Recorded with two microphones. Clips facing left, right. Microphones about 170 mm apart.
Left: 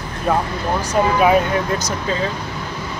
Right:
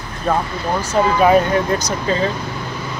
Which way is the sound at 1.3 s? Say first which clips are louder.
Right 2 dB; 5° left (ahead or behind).